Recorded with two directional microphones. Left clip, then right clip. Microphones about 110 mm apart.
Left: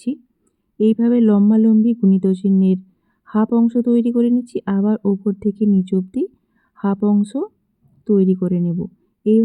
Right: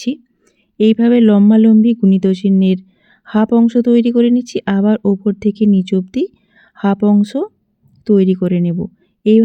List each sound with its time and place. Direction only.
0.8 s speech: 20° right (ahead or behind)